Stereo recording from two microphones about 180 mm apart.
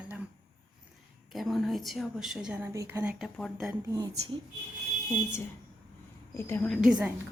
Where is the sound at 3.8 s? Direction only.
20° right (ahead or behind).